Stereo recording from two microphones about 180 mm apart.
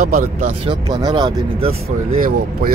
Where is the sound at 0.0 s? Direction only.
45° right (ahead or behind).